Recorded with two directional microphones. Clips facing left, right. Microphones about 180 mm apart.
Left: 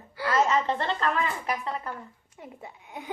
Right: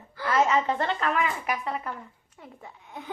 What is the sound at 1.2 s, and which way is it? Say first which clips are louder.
Speech: right 1 dB; 30° left (ahead or behind).